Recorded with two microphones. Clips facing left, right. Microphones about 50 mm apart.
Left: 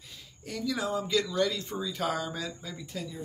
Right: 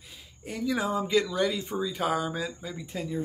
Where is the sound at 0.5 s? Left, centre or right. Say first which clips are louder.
Right 3 dB; right.